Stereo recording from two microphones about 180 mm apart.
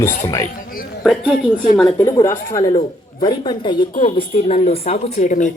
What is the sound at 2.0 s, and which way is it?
A woman's voice, 15° left (ahead or behind).